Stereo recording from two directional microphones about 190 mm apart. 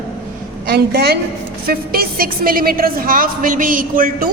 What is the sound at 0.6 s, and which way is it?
A woman's voice, 55° right (ahead or behind).